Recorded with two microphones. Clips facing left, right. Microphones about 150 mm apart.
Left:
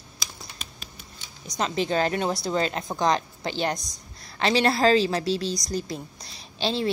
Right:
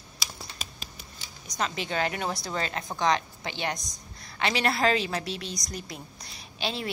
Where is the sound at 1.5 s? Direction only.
30° left (ahead or behind).